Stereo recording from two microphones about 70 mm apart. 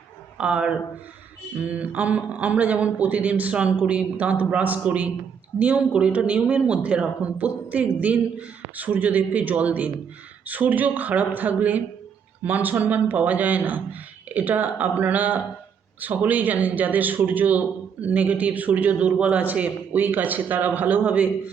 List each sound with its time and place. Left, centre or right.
0.3 s speech: centre